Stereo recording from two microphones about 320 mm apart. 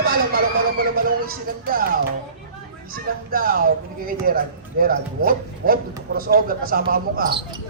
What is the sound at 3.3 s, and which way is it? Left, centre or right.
Speech, right.